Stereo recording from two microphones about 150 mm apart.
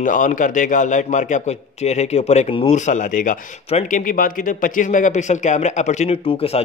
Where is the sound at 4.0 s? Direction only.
65° left (ahead or behind).